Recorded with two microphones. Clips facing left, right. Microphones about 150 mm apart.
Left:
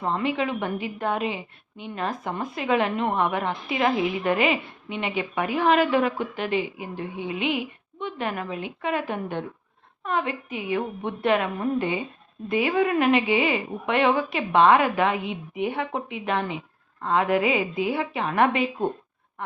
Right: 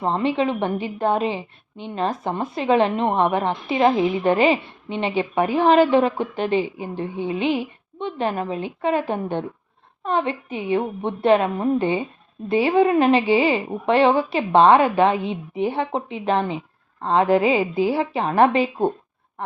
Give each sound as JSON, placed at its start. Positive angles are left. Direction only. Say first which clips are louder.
{"t": 0.0, "sound": "a woman's voice", "louder": "right 4 dB", "side_deg": -30}